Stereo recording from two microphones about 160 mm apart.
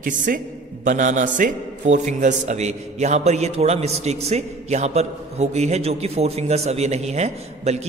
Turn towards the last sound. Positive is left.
turn(degrees=-45)  # may be behind; listen again after turning